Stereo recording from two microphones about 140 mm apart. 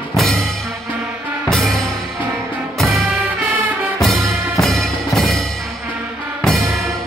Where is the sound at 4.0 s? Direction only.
Centre (ahead or behind).